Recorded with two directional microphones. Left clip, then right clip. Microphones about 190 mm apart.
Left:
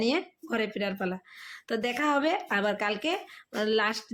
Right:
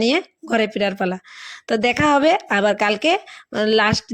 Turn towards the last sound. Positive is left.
turn(degrees=-40)  # may be behind; listen again after turning